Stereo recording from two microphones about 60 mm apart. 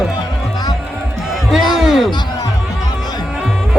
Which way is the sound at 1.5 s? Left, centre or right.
Centre.